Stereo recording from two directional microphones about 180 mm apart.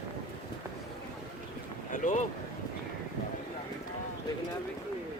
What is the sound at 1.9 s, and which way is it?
Boat, 45° left (ahead or behind).